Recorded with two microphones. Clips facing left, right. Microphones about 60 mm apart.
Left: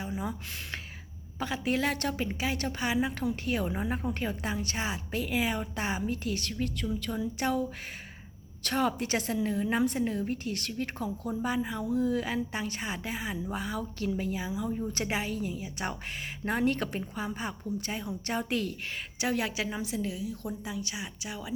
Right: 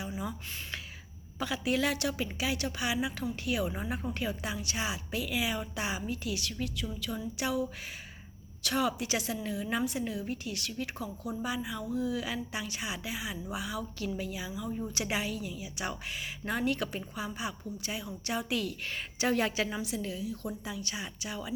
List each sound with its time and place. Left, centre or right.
0.2 s speech: left
1.4 s a woman's voice: left
8.6 s a woman's voice: left
19.2 s a woman's voice: centre
19.7 s speech: left
20.0 s speech: centre